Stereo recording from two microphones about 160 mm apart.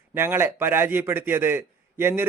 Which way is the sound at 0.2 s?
15° right (ahead or behind).